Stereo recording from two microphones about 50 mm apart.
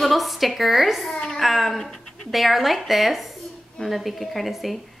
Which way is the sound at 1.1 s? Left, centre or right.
Centre.